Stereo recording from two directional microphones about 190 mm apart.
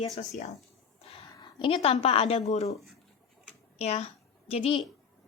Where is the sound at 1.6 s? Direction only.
30° left (ahead or behind).